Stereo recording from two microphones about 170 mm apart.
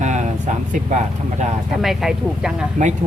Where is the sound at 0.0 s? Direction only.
45° right (ahead or behind).